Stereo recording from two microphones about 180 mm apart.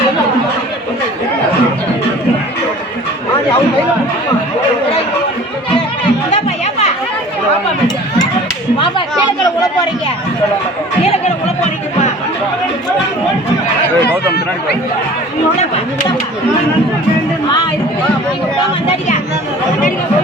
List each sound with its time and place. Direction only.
6.3 s music: 35° left (ahead or behind)